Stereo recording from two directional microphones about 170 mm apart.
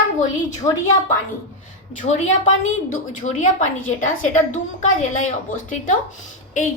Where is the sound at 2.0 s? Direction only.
45° left (ahead or behind).